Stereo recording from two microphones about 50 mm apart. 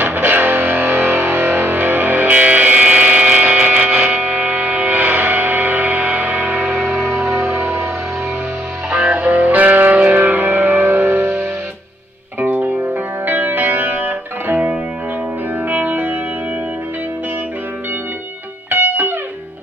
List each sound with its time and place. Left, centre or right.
0.0 s music: right
6.8 s music: centre
7.1 s music: right
9.1 s music: right
12.4 s music: right
15.7 s music: right
18.7 s music: right